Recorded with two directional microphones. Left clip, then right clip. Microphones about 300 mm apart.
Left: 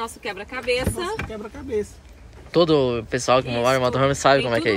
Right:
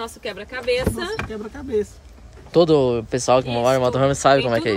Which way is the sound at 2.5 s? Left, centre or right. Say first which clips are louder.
Right 2 dB; centre.